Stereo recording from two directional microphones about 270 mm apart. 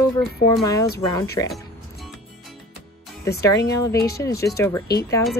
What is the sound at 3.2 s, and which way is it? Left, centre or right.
Speech, centre.